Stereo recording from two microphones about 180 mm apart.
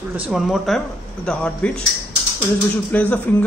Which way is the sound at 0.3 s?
Centre (ahead or behind).